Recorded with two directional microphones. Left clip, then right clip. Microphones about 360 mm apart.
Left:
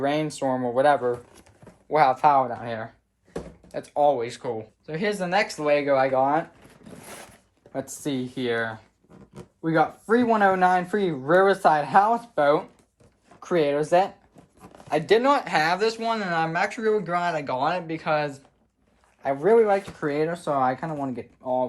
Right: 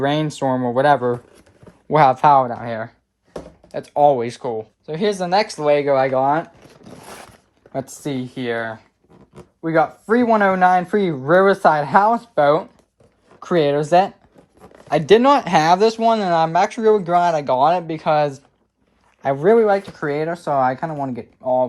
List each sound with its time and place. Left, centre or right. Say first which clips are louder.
0.0 s speech: right 5 dB; right
7.7 s speech: right 4 dB; right
19.2 s speech: right 5 dB; right